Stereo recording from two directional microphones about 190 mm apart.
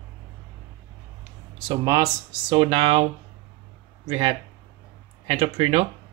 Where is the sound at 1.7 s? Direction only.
20° right (ahead or behind).